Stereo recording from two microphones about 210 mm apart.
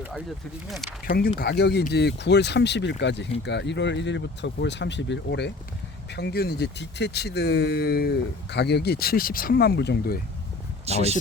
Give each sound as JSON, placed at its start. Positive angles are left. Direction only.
{"t": 0.7, "sound": "speech", "side_deg": 0}
{"t": 1.0, "sound": "speech", "side_deg": 45}
{"t": 10.8, "sound": "speech", "side_deg": -30}